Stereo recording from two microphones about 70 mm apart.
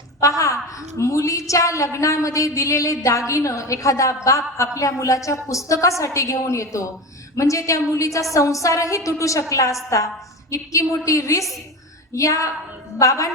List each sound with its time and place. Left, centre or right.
0.2 s a woman's voice: left